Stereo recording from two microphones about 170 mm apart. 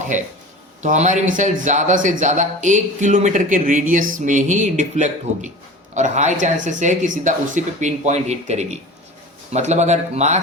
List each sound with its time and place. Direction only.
0.1 s speech: 45° right (ahead or behind)